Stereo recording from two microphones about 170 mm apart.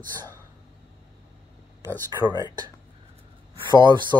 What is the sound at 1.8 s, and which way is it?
Speech, 25° right (ahead or behind).